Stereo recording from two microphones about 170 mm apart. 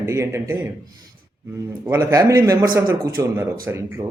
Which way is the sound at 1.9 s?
15° right (ahead or behind).